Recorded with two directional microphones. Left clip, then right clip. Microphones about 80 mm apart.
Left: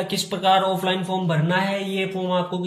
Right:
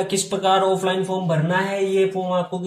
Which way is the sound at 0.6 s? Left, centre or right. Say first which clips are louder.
Right 3 dB; centre.